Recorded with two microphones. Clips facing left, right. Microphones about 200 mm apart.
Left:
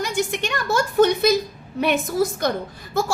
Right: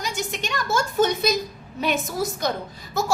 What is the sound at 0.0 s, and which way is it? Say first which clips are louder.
A woman's voice: left 6 dB; 55° left (ahead or behind).